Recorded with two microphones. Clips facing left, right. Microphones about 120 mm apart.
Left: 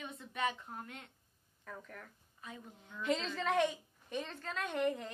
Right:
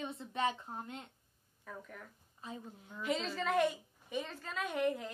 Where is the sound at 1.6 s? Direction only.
5° right (ahead or behind).